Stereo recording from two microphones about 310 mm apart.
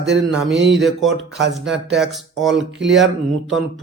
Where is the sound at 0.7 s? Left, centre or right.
Centre.